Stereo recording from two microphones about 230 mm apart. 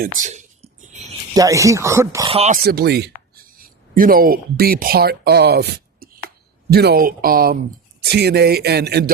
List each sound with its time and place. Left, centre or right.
0.2 s a sound: right
1.3 s speech: centre
2.3 s speech: right
2.6 s speech: right